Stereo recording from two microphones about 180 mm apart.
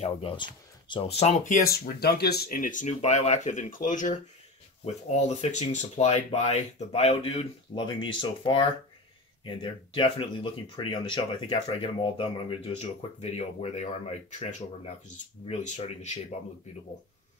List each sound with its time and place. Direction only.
0.0 s speech: 30° left (ahead or behind); by 1.7 s 45° left (ahead or behind)
2.0 s speech: 65° left (ahead or behind); by 16.3 s 40° left (ahead or behind)